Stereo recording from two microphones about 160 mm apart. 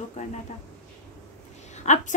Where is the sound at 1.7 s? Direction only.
50° left (ahead or behind).